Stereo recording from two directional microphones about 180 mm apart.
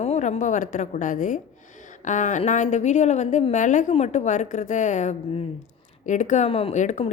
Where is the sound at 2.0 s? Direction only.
45° left (ahead or behind).